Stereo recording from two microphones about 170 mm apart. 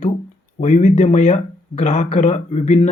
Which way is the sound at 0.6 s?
45° left (ahead or behind).